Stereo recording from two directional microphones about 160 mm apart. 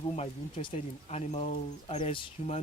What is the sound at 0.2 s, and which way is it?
Speech, 35° left (ahead or behind).